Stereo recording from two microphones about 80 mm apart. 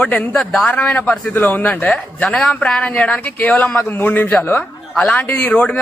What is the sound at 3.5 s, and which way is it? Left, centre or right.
Speech, centre.